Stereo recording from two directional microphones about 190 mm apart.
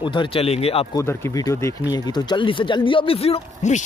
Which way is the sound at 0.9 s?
15° left (ahead or behind).